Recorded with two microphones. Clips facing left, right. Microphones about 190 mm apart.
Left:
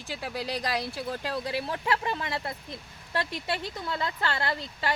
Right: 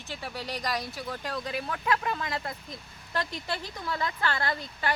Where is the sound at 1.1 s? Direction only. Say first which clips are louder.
Left 2 dB; 30° left (ahead or behind).